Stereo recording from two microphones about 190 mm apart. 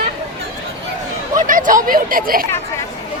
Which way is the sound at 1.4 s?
45° right (ahead or behind).